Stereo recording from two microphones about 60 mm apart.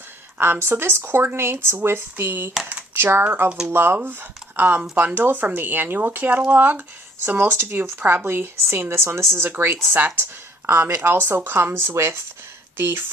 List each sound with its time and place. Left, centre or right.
0.3 s speech: right
7.3 s speech: right